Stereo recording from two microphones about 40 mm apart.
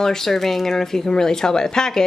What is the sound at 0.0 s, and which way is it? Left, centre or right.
Speech, centre.